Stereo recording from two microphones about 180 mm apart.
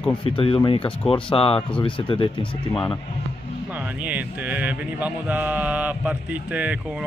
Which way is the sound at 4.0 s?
10° right (ahead or behind).